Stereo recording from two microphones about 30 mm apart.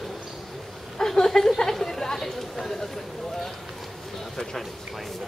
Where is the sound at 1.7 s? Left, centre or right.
Centre.